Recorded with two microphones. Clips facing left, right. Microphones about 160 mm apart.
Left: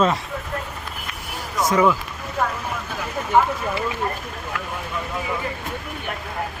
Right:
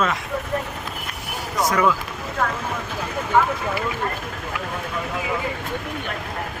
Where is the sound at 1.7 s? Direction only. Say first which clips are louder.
Left 3 dB; 20° left (ahead or behind).